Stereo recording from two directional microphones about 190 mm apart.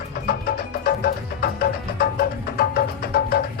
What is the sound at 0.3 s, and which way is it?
Music, 55° left (ahead or behind).